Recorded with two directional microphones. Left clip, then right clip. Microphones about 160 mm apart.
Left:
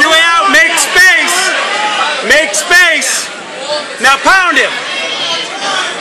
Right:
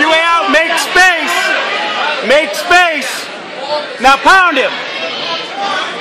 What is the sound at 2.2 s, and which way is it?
Speech, 50° right (ahead or behind).